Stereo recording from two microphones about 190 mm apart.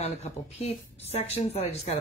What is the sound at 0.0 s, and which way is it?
A woman's voice, 35° left (ahead or behind).